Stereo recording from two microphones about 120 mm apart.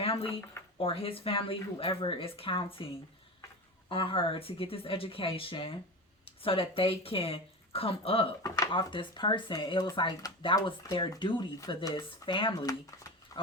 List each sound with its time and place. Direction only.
0.0 s a sound: 50° left (ahead or behind)
0.8 s speech: 50° left (ahead or behind)
8.4 s speech: 30° left (ahead or behind)
8.7 s speech: 40° left (ahead or behind)
13.4 s pig: 40° left (ahead or behind)